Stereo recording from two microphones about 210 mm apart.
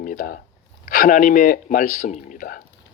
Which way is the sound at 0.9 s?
40° left (ahead or behind).